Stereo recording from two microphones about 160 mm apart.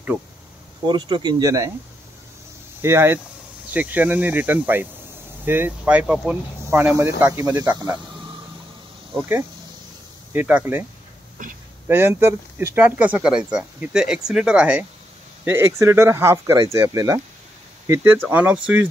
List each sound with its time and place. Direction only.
0.8 s speech: 30° right (ahead or behind)
2.8 s speech: 15° right (ahead or behind)
10.3 s speech: 10° right (ahead or behind)
11.9 s speech: 15° right (ahead or behind)